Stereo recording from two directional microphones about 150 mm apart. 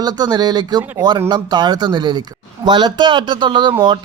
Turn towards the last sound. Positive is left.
turn(degrees=-30)  # may be behind; listen again after turning